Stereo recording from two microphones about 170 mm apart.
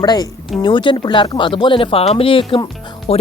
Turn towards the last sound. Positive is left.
turn(degrees=35)  # may be behind; listen again after turning